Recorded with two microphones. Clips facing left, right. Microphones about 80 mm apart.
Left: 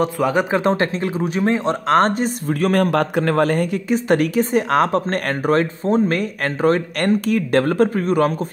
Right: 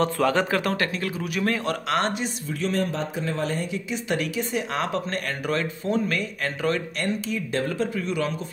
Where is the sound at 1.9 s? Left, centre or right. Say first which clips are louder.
Left 11 dB; left.